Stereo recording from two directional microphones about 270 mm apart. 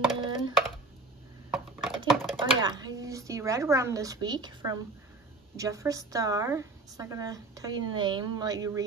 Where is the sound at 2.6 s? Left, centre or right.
Centre.